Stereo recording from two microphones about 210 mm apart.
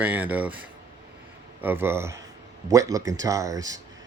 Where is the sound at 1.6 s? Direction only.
10° right (ahead or behind).